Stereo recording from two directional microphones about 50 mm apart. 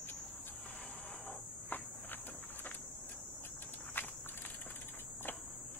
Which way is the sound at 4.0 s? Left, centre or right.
Left.